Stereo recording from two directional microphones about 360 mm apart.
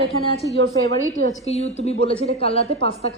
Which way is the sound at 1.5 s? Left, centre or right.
Centre.